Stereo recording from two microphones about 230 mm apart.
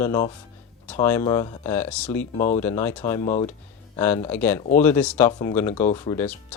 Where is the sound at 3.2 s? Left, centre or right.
Left.